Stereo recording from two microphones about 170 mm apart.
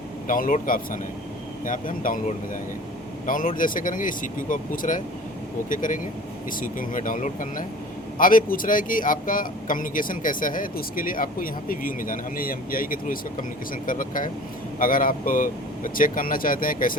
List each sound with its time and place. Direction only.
0.3 s speech: 55° left (ahead or behind)
3.2 s speech: 50° left (ahead or behind)